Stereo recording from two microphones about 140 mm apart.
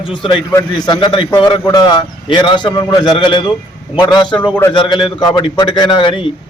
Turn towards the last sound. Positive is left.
turn(degrees=40)  # may be behind; listen again after turning